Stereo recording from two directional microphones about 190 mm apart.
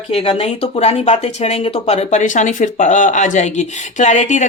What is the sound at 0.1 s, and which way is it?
Speech, 35° left (ahead or behind).